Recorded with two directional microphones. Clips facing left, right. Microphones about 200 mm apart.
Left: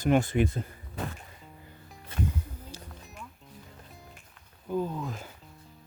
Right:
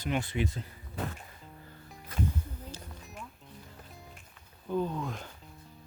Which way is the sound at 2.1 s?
25° left (ahead or behind).